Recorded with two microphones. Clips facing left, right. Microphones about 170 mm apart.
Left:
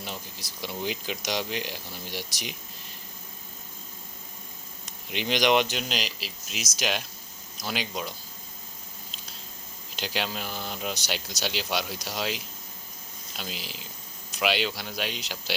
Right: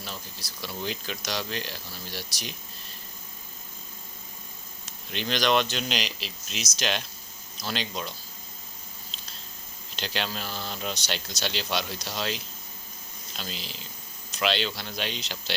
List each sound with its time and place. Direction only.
0.0 s speech: 20° left (ahead or behind)
5.1 s speech: 15° left (ahead or behind)
5.9 s speech: 5° left (ahead or behind)
9.9 s speech: 10° left (ahead or behind)